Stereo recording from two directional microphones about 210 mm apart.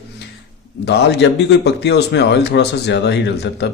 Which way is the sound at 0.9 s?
55° left (ahead or behind).